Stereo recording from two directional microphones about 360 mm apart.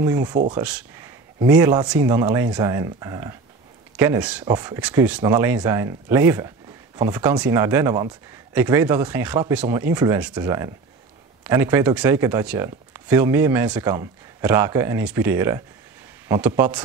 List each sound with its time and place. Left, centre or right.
0.0 s speech: centre